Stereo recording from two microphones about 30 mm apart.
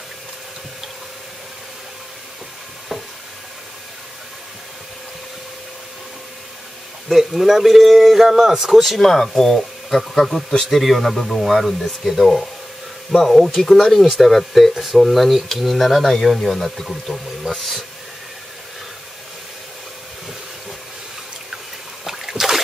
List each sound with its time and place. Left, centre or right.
7.1 s speech: centre
8.3 s speech: centre
9.0 s speech: centre
13.1 s speech: centre
22.0 s splash: centre